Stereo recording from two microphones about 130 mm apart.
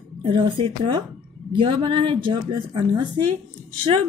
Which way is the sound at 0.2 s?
40° right (ahead or behind).